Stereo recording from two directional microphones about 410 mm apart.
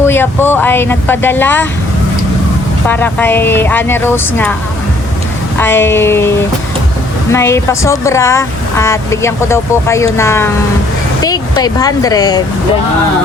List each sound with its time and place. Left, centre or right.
0.0 s speech: centre
2.8 s speech: centre
5.5 s speech: centre
7.3 s speech: centre